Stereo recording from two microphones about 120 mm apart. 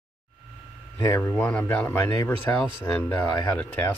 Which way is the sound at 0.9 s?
20° left (ahead or behind).